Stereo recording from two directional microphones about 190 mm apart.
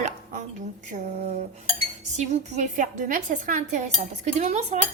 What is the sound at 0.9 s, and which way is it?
Dishes, 35° right (ahead or behind).